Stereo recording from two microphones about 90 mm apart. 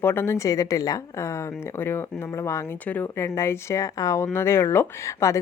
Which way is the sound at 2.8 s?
20° left (ahead or behind).